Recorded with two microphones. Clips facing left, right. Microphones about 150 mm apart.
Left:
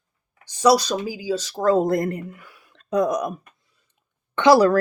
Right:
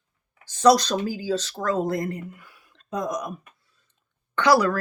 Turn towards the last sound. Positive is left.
turn(degrees=20)  # may be behind; listen again after turning